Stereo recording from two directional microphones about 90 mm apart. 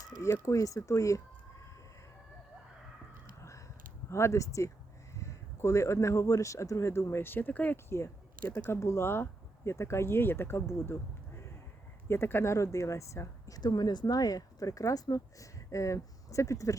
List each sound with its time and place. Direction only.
0.0 s speech: 35° left (ahead or behind)
4.1 s speech: 35° left (ahead or behind)
7.9 s speech: 30° left (ahead or behind)
12.0 s speech: 30° left (ahead or behind)
13.6 s speech: 50° left (ahead or behind)